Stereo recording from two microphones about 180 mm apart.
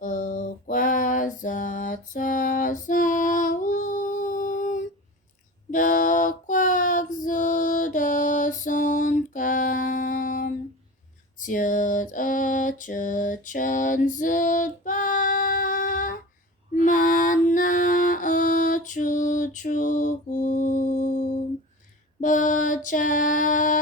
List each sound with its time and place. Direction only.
0.0 s a sound: 45° left (ahead or behind)
5.7 s female singing: 45° left (ahead or behind)
11.3 s mantra: 45° left (ahead or behind)
16.8 s music: 45° left (ahead or behind)
22.2 s mantra: 45° left (ahead or behind)